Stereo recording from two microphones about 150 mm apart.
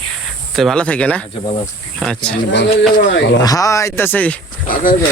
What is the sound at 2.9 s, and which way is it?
Speech, 80° left.